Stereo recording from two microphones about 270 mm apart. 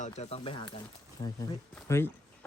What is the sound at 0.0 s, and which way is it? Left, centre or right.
Speech, left.